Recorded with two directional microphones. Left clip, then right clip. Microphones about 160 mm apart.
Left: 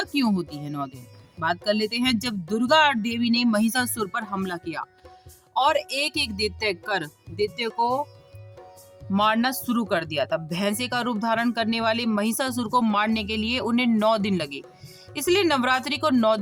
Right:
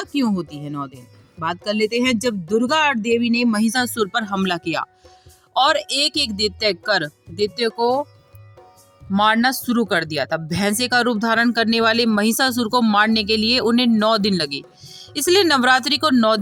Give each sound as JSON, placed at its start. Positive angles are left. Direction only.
{"t": 0.0, "sound": "speech", "side_deg": -10}
{"t": 4.4, "sound": "speech", "side_deg": -45}
{"t": 5.5, "sound": "speech", "side_deg": -30}
{"t": 9.1, "sound": "speech", "side_deg": -30}